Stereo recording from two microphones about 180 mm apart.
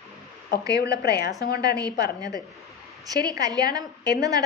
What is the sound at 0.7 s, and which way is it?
Speech, 65° left (ahead or behind).